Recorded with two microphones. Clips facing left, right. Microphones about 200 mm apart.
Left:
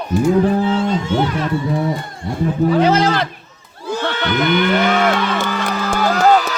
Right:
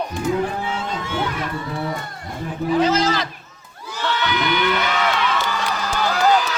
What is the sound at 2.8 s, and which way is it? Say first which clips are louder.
Speech: left 1 dB; 60° left (ahead or behind).